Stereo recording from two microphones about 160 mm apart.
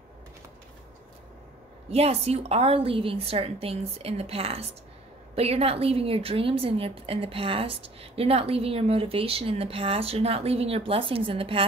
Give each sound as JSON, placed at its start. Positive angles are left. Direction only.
{"t": 1.9, "sound": "a woman's voice", "side_deg": -40}